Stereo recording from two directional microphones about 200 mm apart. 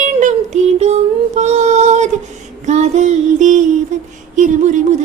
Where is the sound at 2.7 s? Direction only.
35° right (ahead or behind).